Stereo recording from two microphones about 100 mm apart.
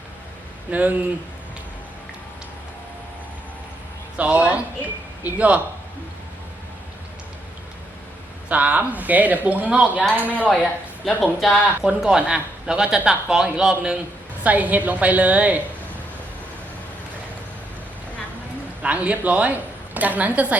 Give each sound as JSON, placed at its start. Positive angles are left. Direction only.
{"t": 0.7, "sound": "speech", "side_deg": -15}
{"t": 4.2, "sound": "speech", "side_deg": -15}
{"t": 8.4, "sound": "speech", "side_deg": -15}
{"t": 11.0, "sound": "speech", "side_deg": 0}
{"t": 18.8, "sound": "a woman's voice", "side_deg": -15}